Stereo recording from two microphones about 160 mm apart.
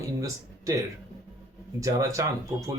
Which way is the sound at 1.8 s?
20° right (ahead or behind).